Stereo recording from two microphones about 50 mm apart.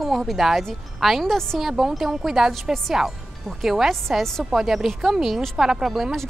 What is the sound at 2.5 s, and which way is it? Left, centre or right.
Speech, centre.